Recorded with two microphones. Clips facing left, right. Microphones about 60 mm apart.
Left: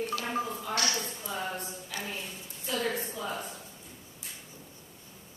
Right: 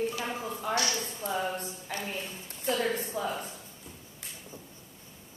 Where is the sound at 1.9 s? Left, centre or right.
Right.